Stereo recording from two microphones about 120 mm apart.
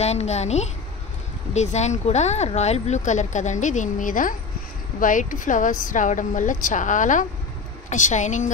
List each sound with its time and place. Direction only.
0.0 s speech: 65° left (ahead or behind); by 8.5 s 85° left